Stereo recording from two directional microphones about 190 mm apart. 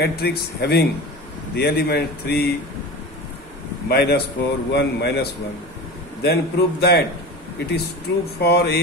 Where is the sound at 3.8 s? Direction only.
55° left (ahead or behind).